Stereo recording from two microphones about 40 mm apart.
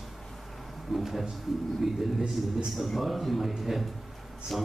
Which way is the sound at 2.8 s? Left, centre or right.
Centre.